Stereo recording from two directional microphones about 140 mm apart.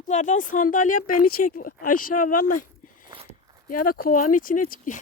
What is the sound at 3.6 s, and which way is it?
Speech, 85° left.